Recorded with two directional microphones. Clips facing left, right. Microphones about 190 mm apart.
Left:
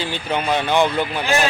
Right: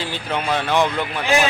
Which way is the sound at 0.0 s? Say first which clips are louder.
Left 2 dB; centre (ahead or behind).